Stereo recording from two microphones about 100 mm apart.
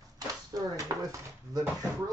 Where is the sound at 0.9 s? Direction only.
35° right (ahead or behind).